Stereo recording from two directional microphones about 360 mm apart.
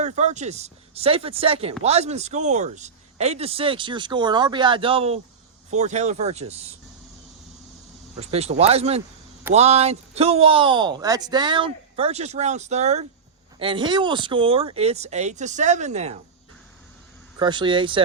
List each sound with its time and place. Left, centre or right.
0.0 s speech: centre
8.2 s speech: centre
17.4 s speech: centre